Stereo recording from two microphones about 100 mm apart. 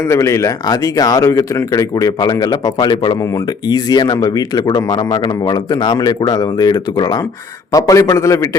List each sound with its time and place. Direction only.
0.0 s a man's voice: 30° left (ahead or behind)